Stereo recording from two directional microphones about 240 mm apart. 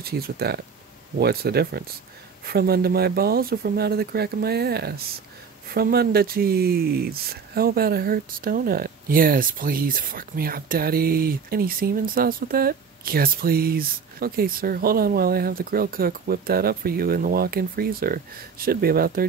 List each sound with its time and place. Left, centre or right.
0.0 s speech: right